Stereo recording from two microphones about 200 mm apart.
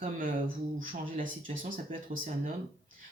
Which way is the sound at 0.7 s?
40° right (ahead or behind).